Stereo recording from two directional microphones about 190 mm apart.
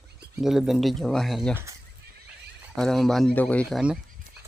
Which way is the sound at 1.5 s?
15° right (ahead or behind).